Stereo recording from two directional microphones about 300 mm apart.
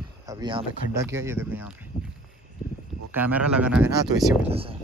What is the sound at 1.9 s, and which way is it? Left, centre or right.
Walk, left.